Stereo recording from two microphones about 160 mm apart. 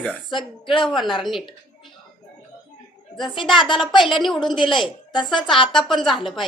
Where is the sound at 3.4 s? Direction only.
Centre (ahead or behind).